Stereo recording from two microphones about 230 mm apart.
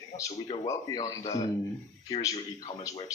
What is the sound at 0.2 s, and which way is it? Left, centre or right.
Speech, centre.